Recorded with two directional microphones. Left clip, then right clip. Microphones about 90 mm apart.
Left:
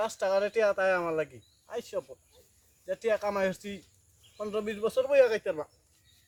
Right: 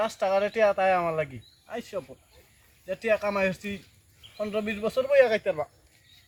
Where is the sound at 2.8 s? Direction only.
15° left (ahead or behind).